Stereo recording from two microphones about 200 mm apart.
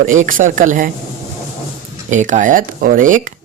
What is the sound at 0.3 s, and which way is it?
Speech, 40° right (ahead or behind).